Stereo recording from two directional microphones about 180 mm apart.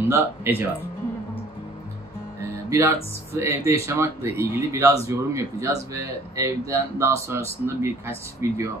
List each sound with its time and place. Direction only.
0.1 s speech: 15° right (ahead or behind)
2.7 s speech: 15° right (ahead or behind)